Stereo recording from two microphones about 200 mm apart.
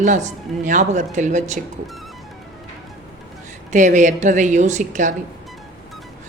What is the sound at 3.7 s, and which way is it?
A woman's voice, 40° right (ahead or behind).